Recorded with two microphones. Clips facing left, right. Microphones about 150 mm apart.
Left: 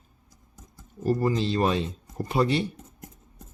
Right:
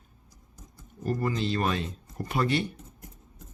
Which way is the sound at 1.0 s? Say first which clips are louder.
Left 4 dB; 35° left (ahead or behind).